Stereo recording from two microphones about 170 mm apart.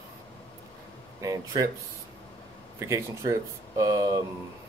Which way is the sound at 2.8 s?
20° right (ahead or behind).